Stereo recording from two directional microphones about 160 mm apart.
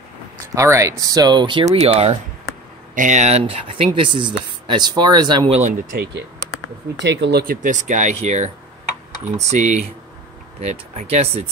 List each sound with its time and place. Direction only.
0.6 s speech: 20° right (ahead or behind)
1.7 s speech: 40° right (ahead or behind)
5.5 s speech: 50° right (ahead or behind); by 6.2 s 65° right (ahead or behind)
7.0 s speech: 90° right; by 8.5 s 45° right (ahead or behind)
9.5 s speech: 45° right (ahead or behind)